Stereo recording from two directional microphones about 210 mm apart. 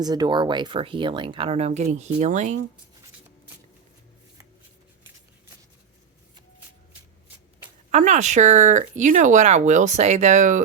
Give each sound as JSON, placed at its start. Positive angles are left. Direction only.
{"t": 0.0, "sound": "speech", "side_deg": -20}
{"t": 7.9, "sound": "speech", "side_deg": -35}